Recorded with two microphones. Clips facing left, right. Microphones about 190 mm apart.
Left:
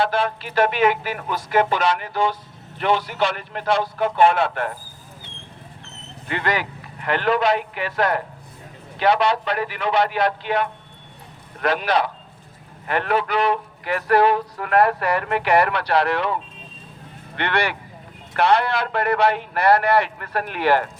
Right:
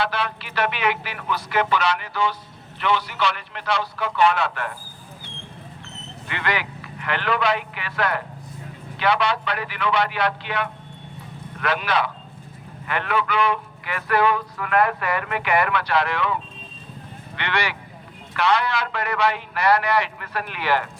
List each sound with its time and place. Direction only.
0.0 s a man's voice: 45° left (ahead or behind)
6.2 s a man's voice: 40° left (ahead or behind)
17.3 s a man's voice: 55° left (ahead or behind)